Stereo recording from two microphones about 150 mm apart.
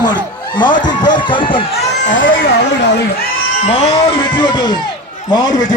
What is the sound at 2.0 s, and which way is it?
Speech, 65° left (ahead or behind).